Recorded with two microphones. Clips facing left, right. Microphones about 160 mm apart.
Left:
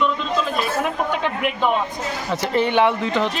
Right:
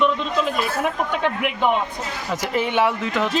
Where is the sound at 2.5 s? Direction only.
5° right (ahead or behind).